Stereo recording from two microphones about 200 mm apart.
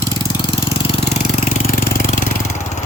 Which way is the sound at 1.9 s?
40° left (ahead or behind).